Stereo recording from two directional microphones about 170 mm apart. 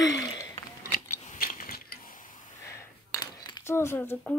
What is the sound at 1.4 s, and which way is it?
Mechanisms, 55° left (ahead or behind).